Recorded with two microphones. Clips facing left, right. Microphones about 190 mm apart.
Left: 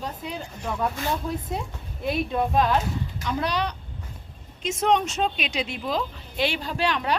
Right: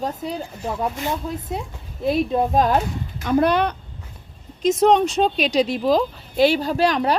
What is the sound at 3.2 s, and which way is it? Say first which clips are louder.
Speech: right 10 dB; 50° right (ahead or behind).